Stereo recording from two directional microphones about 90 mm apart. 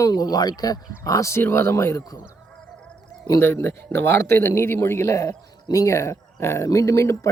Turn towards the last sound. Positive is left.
turn(degrees=35)  # may be behind; listen again after turning